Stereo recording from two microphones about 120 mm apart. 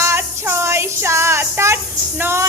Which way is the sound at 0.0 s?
20° right (ahead or behind).